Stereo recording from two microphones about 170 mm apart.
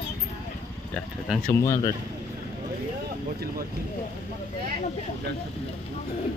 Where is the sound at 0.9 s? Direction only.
Centre (ahead or behind).